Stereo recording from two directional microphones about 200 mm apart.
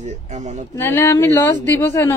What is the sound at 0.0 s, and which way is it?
Speech, 35° right (ahead or behind).